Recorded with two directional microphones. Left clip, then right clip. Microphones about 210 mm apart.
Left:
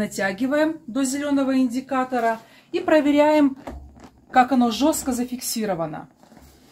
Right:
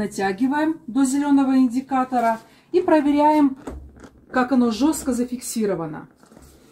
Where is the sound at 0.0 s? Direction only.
20° left (ahead or behind).